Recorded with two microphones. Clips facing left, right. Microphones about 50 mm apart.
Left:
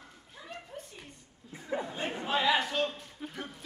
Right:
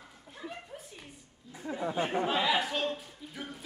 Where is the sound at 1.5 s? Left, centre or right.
Left.